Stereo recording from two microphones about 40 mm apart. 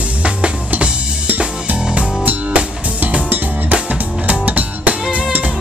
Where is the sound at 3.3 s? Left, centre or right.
Right.